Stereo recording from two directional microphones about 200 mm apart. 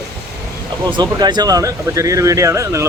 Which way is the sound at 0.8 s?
20° right (ahead or behind).